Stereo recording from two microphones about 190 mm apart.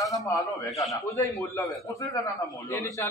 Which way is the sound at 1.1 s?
15° left (ahead or behind).